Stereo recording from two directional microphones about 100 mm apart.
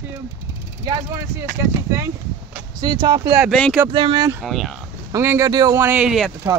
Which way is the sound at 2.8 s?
50° right (ahead or behind).